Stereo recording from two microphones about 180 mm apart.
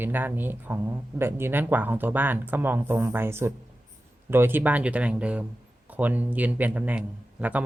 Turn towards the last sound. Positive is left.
turn(degrees=-10)  # may be behind; listen again after turning